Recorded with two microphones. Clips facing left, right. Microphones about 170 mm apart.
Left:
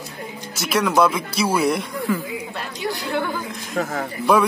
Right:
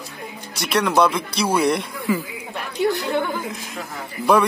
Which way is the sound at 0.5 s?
Centre (ahead or behind).